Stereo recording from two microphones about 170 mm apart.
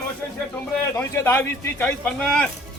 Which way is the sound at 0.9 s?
10° left (ahead or behind).